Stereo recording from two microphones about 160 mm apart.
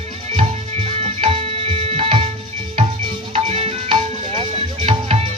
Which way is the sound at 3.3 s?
40° right (ahead or behind).